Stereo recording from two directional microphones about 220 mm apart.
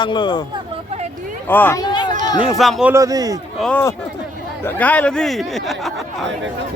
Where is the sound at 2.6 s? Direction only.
Centre (ahead or behind).